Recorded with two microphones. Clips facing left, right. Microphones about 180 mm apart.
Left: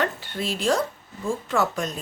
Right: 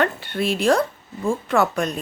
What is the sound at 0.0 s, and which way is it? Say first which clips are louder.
Speech: right 5 dB; 60° right (ahead or behind).